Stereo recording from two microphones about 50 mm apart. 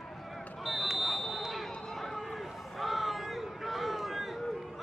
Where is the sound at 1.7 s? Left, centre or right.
Centre.